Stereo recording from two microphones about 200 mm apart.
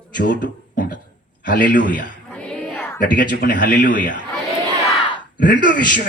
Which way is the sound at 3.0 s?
45° left (ahead or behind).